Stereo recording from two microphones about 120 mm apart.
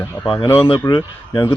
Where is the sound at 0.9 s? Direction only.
40° left (ahead or behind).